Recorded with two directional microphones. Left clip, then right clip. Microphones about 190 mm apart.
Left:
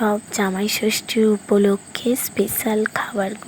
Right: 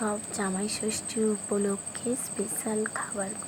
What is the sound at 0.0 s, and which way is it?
Speech, 30° left (ahead or behind).